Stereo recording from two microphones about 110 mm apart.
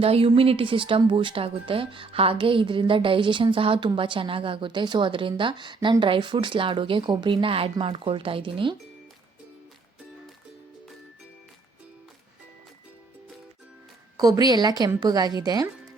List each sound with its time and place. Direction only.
0.0 s speech: 60° right (ahead or behind)
14.2 s a woman's voice: 35° right (ahead or behind)